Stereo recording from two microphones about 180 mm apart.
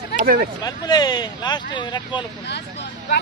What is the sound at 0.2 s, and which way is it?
Speech, 55° right (ahead or behind).